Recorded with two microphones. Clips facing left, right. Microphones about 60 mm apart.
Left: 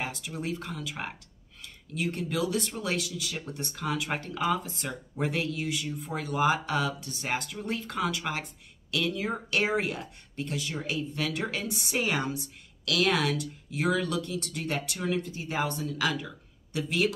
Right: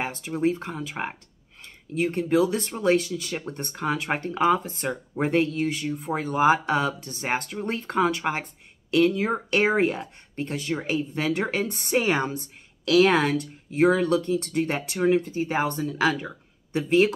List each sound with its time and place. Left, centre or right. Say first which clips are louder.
0.0 s speech: right 9 dB; right